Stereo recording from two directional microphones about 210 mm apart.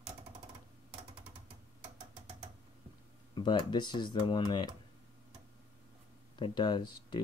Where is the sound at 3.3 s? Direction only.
20° left (ahead or behind).